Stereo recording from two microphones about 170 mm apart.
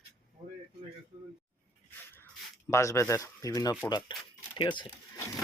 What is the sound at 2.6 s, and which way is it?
Speech, 15° left (ahead or behind).